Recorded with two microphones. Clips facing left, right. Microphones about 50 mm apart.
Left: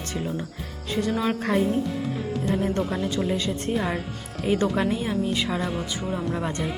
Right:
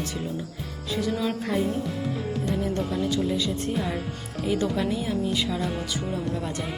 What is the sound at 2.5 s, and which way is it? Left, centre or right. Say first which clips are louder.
Speech: left 3 dB; left.